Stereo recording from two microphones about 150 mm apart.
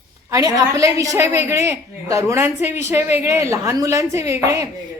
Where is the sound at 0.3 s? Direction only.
25° right (ahead or behind).